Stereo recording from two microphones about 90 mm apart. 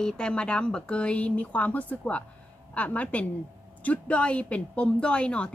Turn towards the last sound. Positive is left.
turn(degrees=10)  # may be behind; listen again after turning